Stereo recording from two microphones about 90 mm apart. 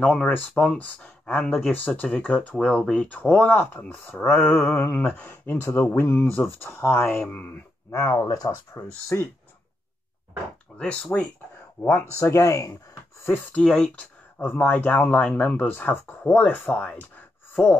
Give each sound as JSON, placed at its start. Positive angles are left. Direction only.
{"t": 0.0, "sound": "speech", "side_deg": 10}
{"t": 7.9, "sound": "speech", "side_deg": 35}
{"t": 10.8, "sound": "speech", "side_deg": 10}
{"t": 11.8, "sound": "speech", "side_deg": 25}
{"t": 13.2, "sound": "speech", "side_deg": 20}